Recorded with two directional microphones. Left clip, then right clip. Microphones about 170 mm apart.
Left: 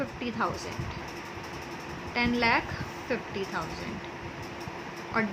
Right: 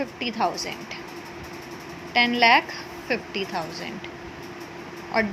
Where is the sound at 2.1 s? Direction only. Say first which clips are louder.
Right 8 dB; 15° right (ahead or behind).